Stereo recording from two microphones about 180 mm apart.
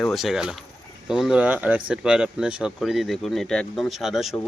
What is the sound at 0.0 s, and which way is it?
Speech, centre (ahead or behind).